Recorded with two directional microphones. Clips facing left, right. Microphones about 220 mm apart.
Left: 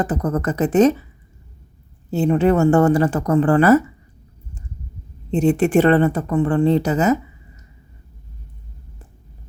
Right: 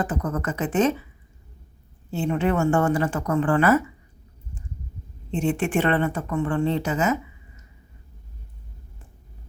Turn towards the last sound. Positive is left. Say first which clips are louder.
# left 7 dB
turn(degrees=40)  # may be behind; listen again after turning